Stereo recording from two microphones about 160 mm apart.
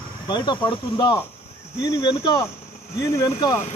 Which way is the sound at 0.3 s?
30° left (ahead or behind).